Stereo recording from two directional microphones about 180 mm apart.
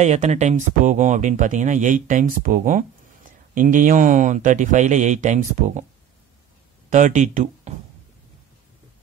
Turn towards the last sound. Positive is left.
turn(degrees=-45)  # may be behind; listen again after turning